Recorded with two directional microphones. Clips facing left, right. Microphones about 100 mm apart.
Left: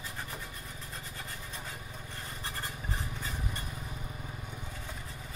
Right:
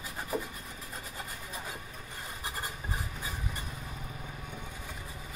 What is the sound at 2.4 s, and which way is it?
Rub, 15° right (ahead or behind).